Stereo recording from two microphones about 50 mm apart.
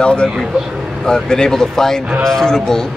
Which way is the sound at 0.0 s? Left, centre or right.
Centre.